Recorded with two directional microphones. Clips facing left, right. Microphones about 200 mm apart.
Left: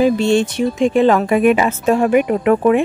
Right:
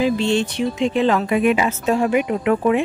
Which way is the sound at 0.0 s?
45° left (ahead or behind).